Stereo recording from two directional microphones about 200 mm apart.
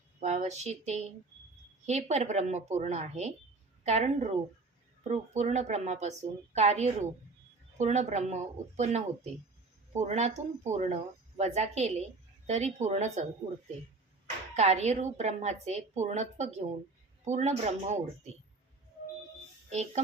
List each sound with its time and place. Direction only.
0.2 s speech: 35° right (ahead or behind)
14.5 s speech: 35° right (ahead or behind)